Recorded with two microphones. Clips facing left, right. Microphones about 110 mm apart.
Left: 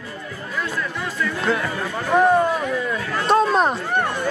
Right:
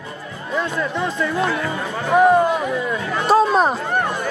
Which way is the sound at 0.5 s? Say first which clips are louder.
Right 5 dB; 25° right (ahead or behind).